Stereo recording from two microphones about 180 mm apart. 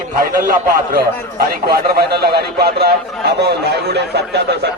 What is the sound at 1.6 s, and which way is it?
Speech, 65° right (ahead or behind).